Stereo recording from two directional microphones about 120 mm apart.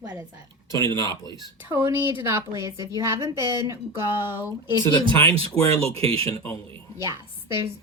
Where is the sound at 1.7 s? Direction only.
20° right (ahead or behind).